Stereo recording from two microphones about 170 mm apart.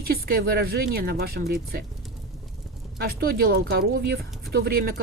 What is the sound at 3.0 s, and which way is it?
Speech, 60° right (ahead or behind).